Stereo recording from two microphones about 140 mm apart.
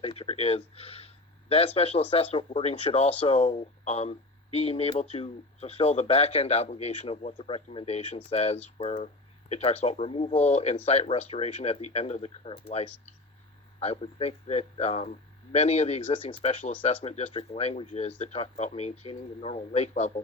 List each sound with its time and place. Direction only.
0.0 s speech: 45° left (ahead or behind)